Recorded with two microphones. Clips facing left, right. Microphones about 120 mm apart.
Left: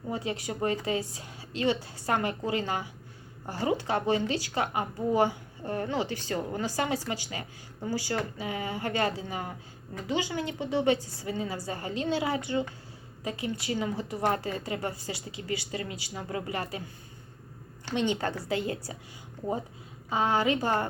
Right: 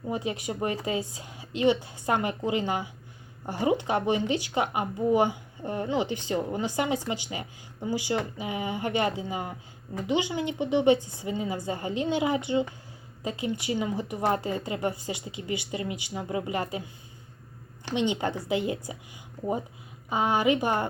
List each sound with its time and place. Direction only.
0.1 s speech: 20° right (ahead or behind)
17.8 s speech: 20° right (ahead or behind)
20.1 s speech: 20° right (ahead or behind)